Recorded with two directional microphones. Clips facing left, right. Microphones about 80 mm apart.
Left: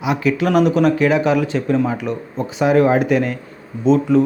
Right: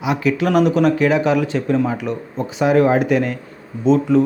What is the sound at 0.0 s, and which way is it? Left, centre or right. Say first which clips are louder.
Speech: even; left.